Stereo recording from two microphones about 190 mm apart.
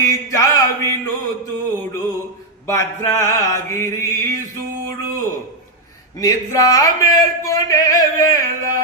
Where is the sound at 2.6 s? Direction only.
15° left (ahead or behind).